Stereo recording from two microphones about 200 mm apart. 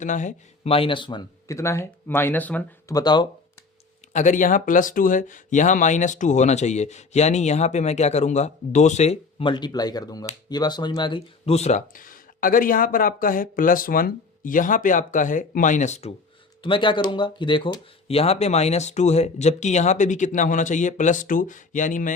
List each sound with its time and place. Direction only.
0.0 s speech: 40° left (ahead or behind); by 2.6 s 10° left (ahead or behind)
2.9 s speech: 20° left (ahead or behind)
4.1 s speech: 40° left (ahead or behind)